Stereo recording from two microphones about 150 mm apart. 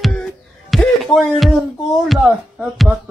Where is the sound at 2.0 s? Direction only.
Centre (ahead or behind).